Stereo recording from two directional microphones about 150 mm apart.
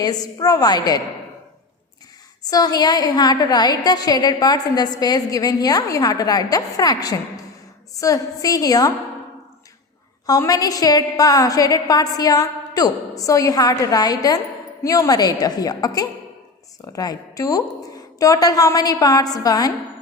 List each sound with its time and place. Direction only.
0.0 s a woman's voice: 25° left (ahead or behind)
2.4 s a woman's voice: 25° left (ahead or behind)
10.2 s a woman's voice: 25° left (ahead or behind)